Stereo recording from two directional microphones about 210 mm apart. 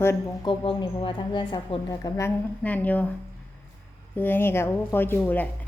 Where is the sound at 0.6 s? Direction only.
25° left (ahead or behind); by 3.1 s 10° left (ahead or behind).